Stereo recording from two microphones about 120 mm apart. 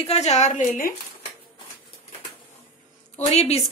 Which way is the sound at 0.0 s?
60° left (ahead or behind).